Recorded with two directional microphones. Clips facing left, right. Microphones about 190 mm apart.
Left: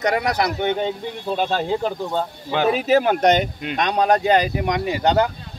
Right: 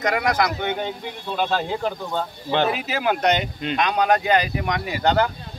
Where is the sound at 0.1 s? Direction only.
30° left (ahead or behind).